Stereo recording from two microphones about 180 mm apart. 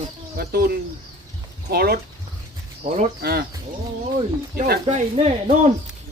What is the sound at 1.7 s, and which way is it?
Speech, 60° right (ahead or behind).